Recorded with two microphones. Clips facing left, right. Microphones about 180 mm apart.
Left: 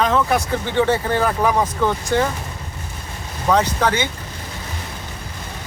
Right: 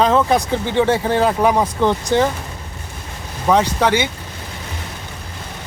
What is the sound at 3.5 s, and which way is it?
Speech, 15° right (ahead or behind).